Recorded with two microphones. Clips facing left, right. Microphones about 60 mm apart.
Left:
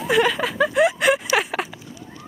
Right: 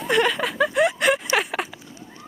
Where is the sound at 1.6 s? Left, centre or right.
Left.